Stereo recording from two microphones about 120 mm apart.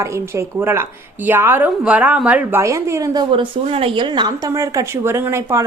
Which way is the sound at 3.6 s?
50° right (ahead or behind).